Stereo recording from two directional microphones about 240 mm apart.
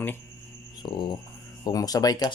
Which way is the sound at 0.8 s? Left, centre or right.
Centre.